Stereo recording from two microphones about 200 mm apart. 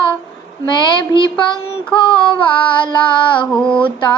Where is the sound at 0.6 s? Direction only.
25° left (ahead or behind).